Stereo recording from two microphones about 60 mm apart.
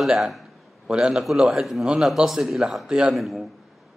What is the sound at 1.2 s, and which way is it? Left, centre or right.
A man's voice, centre.